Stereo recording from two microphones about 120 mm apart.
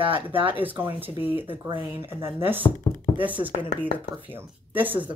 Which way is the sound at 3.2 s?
15° right (ahead or behind).